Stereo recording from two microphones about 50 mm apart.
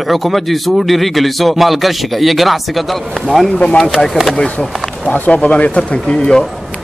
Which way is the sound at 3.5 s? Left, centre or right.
Centre.